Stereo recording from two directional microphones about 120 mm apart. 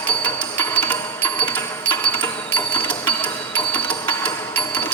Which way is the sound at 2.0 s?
15° left (ahead or behind).